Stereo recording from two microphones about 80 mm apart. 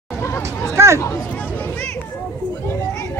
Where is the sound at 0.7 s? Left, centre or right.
Right.